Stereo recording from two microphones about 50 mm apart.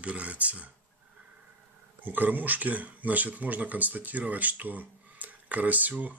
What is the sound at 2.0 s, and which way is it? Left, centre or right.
Speech, right.